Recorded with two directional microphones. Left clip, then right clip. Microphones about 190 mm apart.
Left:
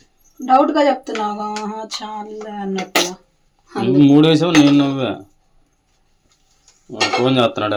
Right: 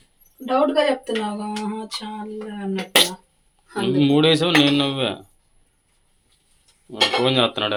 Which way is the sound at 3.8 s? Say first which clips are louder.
Left 5 dB; 10° left (ahead or behind).